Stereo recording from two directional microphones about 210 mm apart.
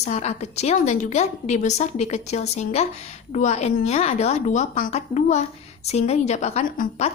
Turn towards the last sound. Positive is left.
turn(degrees=30)  # may be behind; listen again after turning